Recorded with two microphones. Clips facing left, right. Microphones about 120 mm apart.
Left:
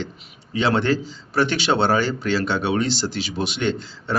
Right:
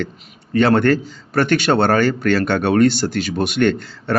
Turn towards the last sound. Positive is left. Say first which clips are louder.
# right 6 dB
turn(degrees=-55)  # may be behind; listen again after turning